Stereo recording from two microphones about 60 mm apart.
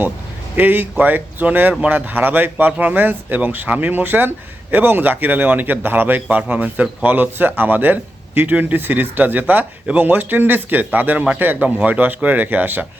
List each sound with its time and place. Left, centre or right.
0.5 s speech: right